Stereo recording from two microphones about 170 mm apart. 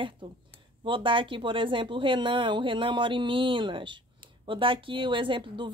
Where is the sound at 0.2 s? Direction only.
30° right (ahead or behind).